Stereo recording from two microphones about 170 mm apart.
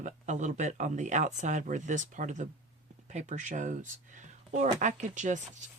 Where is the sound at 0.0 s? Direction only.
45° right (ahead or behind).